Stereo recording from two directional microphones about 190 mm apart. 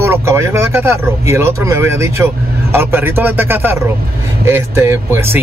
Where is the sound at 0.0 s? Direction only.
15° right (ahead or behind).